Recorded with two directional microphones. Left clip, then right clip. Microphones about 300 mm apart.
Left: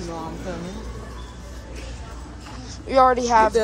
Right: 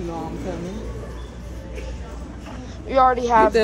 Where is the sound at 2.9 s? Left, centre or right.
Centre.